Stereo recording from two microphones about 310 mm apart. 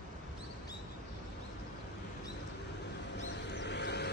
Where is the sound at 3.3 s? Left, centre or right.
Left.